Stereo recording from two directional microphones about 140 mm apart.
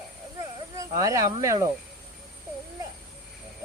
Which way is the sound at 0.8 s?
25° right (ahead or behind).